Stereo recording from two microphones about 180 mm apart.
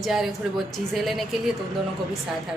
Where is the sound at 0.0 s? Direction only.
Centre (ahead or behind).